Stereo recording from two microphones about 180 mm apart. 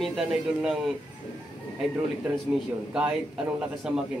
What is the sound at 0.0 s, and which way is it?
Speech, centre (ahead or behind).